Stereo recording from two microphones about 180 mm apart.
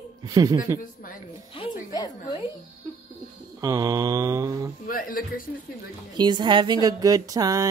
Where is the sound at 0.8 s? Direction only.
50° left (ahead or behind).